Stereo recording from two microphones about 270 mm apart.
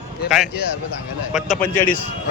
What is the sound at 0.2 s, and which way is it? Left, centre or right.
Speech, left.